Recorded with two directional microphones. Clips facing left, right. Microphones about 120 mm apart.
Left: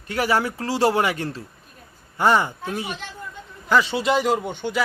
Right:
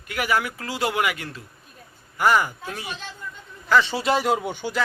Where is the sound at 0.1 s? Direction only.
30° left (ahead or behind).